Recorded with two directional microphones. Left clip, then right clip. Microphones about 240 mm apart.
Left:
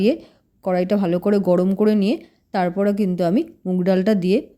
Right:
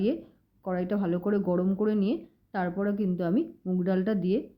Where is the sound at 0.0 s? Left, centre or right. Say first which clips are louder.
Left 10 dB; left.